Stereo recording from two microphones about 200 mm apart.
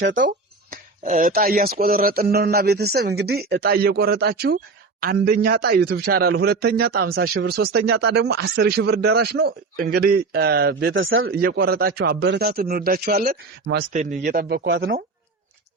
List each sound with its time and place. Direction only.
0.3 s speech: 40° right (ahead or behind)
10.9 s speech: 80° right
11.3 s speech: 50° right (ahead or behind)
13.9 s speech: 35° right (ahead or behind)